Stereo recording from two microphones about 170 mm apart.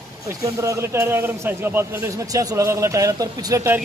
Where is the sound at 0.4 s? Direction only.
20° right (ahead or behind).